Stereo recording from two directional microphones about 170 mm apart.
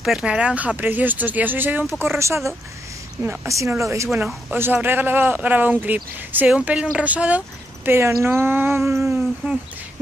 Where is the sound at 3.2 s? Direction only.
10° right (ahead or behind).